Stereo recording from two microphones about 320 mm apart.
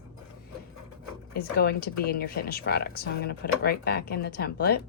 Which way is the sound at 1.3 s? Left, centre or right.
Left.